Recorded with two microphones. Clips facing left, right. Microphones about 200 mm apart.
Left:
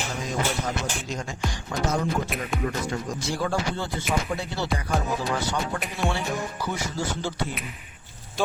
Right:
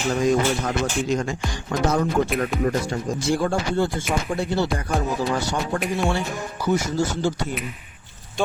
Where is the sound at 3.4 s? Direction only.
50° right (ahead or behind).